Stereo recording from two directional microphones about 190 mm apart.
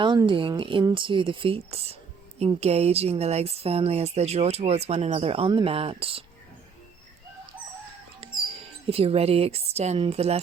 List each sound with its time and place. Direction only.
0.0 s speech: 25° right (ahead or behind)
8.2 s a sound: 30° right (ahead or behind)
8.9 s speech: 30° right (ahead or behind)